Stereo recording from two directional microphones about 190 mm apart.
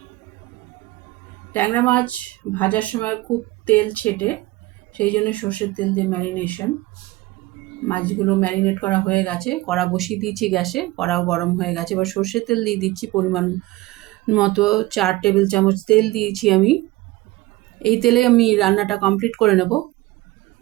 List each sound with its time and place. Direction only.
1.5 s speech: 10° left (ahead or behind)
7.9 s speech: 10° left (ahead or behind)
17.8 s speech: 5° left (ahead or behind)